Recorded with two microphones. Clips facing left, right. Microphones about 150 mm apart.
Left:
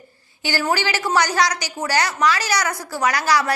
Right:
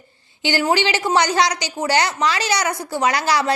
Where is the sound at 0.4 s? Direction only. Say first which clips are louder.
Right 3 dB; 25° right (ahead or behind).